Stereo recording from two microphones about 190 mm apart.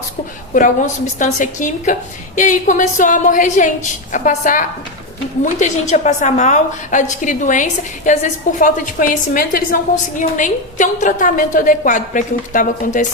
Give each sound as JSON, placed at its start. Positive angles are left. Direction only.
{"t": 1.2, "sound": "a woman's voice", "side_deg": 40}